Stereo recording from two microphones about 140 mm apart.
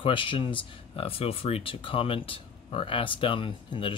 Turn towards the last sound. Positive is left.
turn(degrees=35)  # may be behind; listen again after turning